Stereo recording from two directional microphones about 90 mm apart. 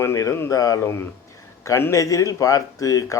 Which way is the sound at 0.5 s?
40° left (ahead or behind).